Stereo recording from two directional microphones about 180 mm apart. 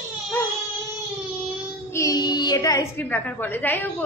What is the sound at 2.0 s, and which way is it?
A woman's voice, 20° left (ahead or behind).